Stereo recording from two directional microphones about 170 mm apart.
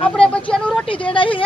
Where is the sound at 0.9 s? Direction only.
30° left (ahead or behind).